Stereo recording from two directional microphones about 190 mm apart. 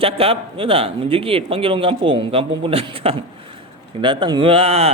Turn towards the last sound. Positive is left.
turn(degrees=-30)  # may be behind; listen again after turning